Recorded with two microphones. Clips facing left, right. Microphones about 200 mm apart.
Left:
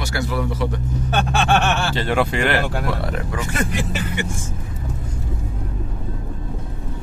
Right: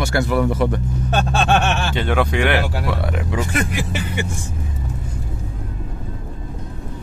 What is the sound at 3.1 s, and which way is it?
Speech, 15° right (ahead or behind).